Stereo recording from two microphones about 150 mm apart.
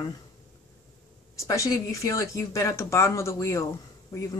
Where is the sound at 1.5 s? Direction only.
20° left (ahead or behind).